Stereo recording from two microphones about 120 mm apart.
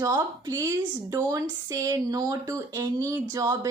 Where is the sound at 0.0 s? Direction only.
30° right (ahead or behind).